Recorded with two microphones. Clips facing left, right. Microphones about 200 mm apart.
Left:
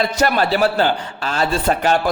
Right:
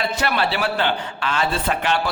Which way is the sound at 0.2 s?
45° left (ahead or behind).